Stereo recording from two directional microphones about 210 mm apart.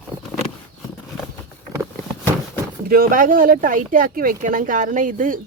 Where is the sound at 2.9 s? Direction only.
45° right (ahead or behind).